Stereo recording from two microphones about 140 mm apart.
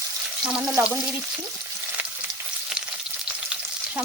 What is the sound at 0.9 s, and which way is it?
Speech, 10° right (ahead or behind).